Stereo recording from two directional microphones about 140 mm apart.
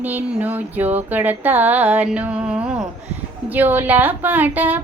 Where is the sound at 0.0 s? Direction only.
10° right (ahead or behind).